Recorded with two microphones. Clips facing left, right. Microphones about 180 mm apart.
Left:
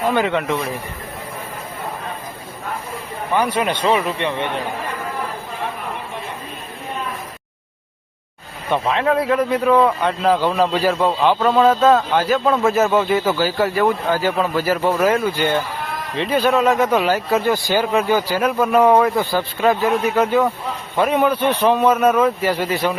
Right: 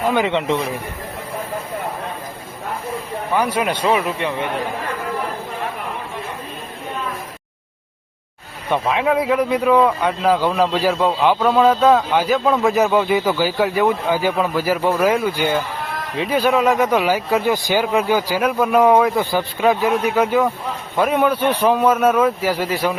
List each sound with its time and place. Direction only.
0.1 s speech: 20° right (ahead or behind)
3.3 s speech: 10° right (ahead or behind)
8.7 s speech: 10° right (ahead or behind)
11.3 s speech: centre (ahead or behind); by 17.8 s 15° right (ahead or behind)
17.8 s speech: 5° right (ahead or behind)
19.2 s speech: 15° right (ahead or behind)
19.6 s speech: centre (ahead or behind)